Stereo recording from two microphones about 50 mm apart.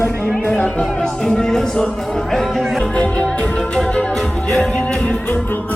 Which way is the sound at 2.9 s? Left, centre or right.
Left.